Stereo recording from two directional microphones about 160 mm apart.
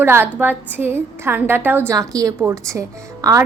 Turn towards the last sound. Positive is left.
turn(degrees=-20)  # may be behind; listen again after turning